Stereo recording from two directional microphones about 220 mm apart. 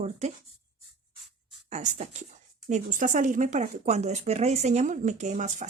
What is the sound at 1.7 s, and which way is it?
Speech, 30° right (ahead or behind).